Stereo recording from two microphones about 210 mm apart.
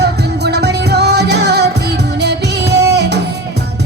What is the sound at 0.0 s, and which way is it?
Music, 50° right (ahead or behind).